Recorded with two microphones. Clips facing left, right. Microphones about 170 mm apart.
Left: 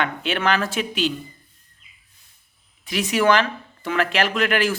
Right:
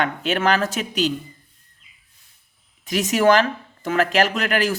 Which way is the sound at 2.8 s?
45° right (ahead or behind).